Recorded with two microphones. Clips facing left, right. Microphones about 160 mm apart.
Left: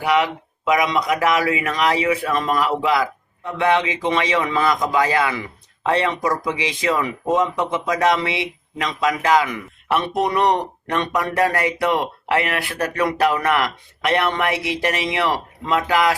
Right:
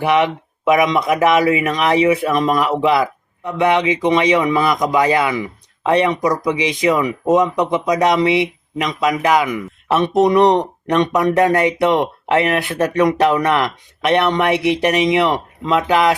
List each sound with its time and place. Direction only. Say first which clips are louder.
0.0 s speech: right 3 dB; 25° right (ahead or behind)